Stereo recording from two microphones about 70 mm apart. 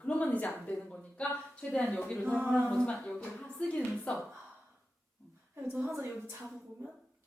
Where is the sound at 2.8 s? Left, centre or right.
Centre.